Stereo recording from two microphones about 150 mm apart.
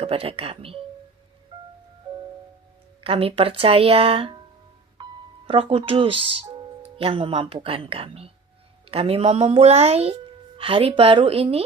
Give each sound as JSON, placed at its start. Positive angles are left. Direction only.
{"t": 0.0, "sound": "speech", "side_deg": -40}
{"t": 1.5, "sound": "music", "side_deg": -30}
{"t": 3.0, "sound": "speech", "side_deg": -40}
{"t": 5.0, "sound": "music", "side_deg": -30}
{"t": 5.5, "sound": "speech", "side_deg": -35}